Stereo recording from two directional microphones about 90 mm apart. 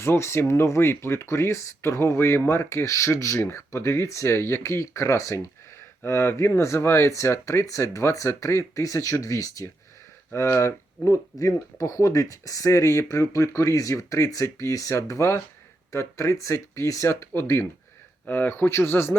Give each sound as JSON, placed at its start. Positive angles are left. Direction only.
{"t": 0.0, "sound": "speech", "side_deg": 30}